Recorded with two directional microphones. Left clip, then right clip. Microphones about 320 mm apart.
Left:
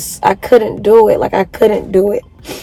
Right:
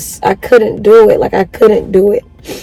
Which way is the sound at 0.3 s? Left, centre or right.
Left.